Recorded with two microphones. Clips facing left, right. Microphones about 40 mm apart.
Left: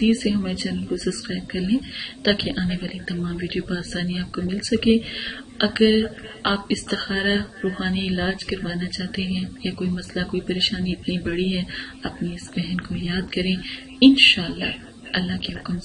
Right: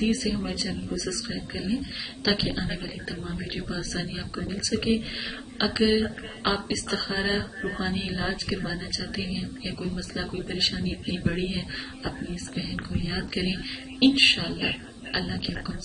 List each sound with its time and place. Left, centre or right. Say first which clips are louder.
0.0 s speech: left 6 dB; left
15.0 s speech: left 4 dB; left